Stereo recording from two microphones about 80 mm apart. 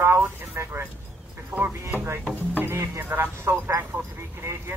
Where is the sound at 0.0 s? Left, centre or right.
Right.